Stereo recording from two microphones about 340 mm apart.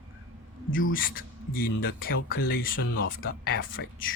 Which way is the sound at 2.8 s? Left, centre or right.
Left.